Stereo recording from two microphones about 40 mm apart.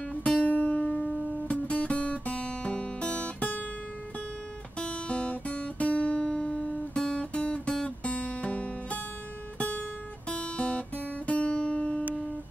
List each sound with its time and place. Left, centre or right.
0.1 s music: left
1.5 s guitar: left
4.7 s guitar: left
11.2 s music: left